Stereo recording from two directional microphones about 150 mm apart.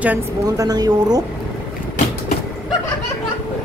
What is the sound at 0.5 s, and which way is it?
Speech, 25° right (ahead or behind).